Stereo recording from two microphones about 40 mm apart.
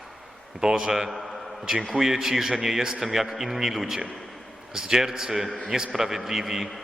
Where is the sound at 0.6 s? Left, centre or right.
Centre.